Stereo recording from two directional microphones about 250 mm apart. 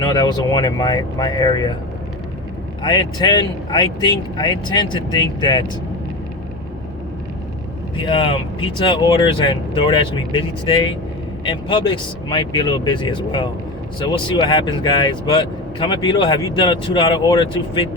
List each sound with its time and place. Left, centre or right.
0.0 s speech: centre
2.8 s speech: centre
8.0 s speech: centre